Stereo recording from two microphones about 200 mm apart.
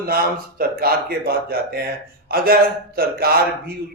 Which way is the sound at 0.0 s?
50° right (ahead or behind).